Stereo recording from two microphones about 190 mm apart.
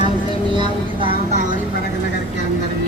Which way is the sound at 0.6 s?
30° right (ahead or behind).